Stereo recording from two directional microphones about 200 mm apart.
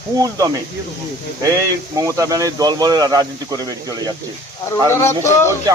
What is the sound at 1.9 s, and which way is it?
Speech, 15° right (ahead or behind).